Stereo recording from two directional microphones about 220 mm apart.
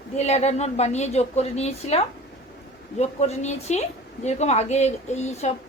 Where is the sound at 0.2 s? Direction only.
30° left (ahead or behind).